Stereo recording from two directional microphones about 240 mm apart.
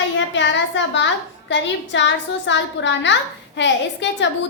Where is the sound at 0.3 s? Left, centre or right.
Left.